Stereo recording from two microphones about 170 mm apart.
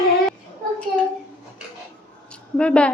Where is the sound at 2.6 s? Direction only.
5° left (ahead or behind).